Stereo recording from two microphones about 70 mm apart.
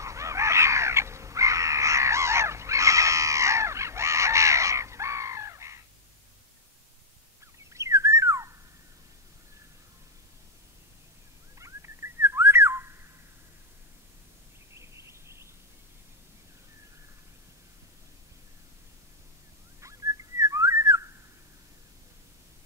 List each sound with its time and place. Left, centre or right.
0.0 s crow: right
7.7 s whistling: right
11.5 s whistling: right
14.8 s a sound: right
19.8 s whistling: right